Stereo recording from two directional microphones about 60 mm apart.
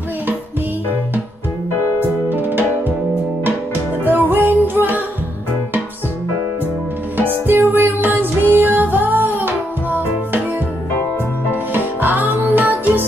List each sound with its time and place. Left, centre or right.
2.2 s music: right
4.0 s music: right
7.4 s music: right
11.5 s music: right